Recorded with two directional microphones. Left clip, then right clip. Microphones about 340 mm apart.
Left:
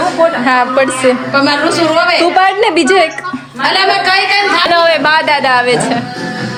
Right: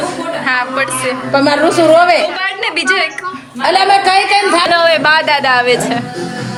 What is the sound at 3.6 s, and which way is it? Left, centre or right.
A woman's voice, centre.